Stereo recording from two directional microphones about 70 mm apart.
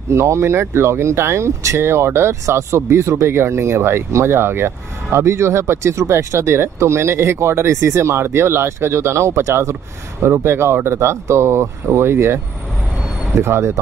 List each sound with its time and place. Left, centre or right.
0.1 s speech: right
13.4 s speech: right